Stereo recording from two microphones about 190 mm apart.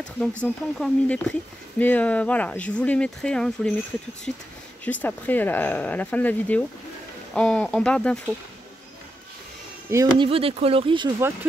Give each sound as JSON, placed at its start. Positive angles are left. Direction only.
{"t": 0.4, "sound": "speech", "side_deg": 5}
{"t": 9.8, "sound": "speech", "side_deg": -15}
{"t": 10.2, "sound": "speech", "side_deg": -30}